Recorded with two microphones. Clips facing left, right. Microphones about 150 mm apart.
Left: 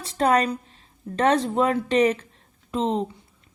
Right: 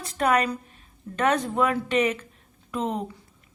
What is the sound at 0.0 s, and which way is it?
Speech, 30° left (ahead or behind).